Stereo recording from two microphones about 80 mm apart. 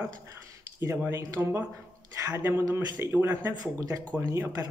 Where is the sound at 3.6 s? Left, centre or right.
Right.